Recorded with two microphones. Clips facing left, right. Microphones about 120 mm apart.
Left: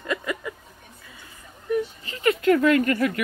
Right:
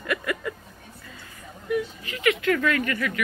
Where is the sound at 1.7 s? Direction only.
35° left (ahead or behind).